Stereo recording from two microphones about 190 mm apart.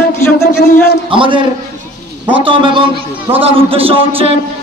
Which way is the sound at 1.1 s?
25° right (ahead or behind).